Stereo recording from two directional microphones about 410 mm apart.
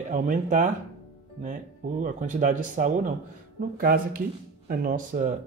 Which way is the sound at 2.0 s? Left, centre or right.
Centre.